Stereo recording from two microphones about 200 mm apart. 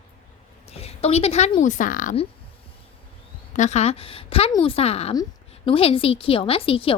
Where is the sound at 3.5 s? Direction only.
35° left (ahead or behind).